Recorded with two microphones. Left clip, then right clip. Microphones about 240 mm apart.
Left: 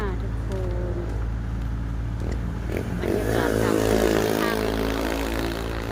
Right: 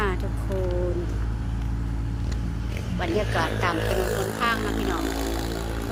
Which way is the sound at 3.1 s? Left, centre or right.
Left.